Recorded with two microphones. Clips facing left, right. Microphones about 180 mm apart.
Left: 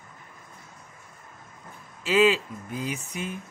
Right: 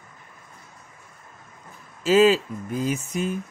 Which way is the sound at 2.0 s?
40° right (ahead or behind).